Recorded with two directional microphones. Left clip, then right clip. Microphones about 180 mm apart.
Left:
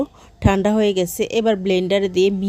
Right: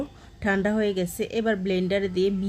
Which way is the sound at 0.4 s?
45° left (ahead or behind).